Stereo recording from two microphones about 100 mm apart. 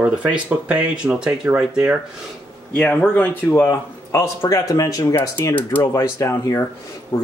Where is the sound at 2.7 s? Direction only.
15° left (ahead or behind); by 5.3 s 35° left (ahead or behind).